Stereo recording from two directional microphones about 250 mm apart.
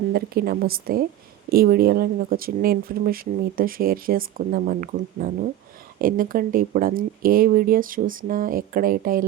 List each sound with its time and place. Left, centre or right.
0.1 s speech: right